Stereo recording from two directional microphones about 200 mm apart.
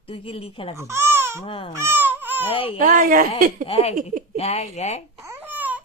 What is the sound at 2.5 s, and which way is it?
Speech, 25° left (ahead or behind).